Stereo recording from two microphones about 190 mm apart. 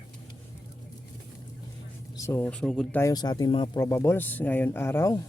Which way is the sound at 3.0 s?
20° left (ahead or behind).